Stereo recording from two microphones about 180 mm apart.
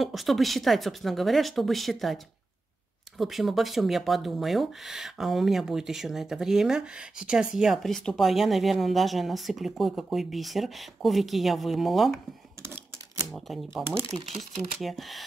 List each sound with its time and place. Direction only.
0.0 s speech: centre (ahead or behind)
3.2 s speech: centre (ahead or behind)
12.6 s typewriter: 15° right (ahead or behind)
13.3 s speech: centre (ahead or behind)
13.9 s speech: 30° right (ahead or behind)
14.8 s speech: centre (ahead or behind)